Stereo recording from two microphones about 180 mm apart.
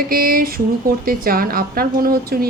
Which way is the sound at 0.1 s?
55° right (ahead or behind).